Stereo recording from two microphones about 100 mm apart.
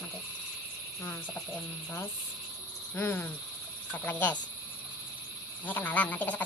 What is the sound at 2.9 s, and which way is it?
Frog, 20° left (ahead or behind).